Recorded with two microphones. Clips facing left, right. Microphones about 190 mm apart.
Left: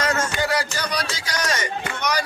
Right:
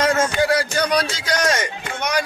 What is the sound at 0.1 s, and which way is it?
Speech, 60° right (ahead or behind).